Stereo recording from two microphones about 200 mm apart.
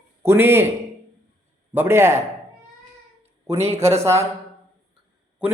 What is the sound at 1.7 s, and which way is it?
Speech, 10° right (ahead or behind).